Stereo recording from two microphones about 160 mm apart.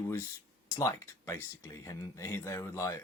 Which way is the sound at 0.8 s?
20° left (ahead or behind).